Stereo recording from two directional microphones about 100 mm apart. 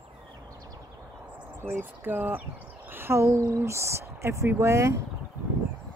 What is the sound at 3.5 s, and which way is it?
Speech, 30° right (ahead or behind).